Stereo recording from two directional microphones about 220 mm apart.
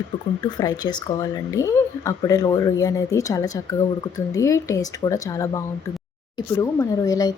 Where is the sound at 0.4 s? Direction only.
20° left (ahead or behind).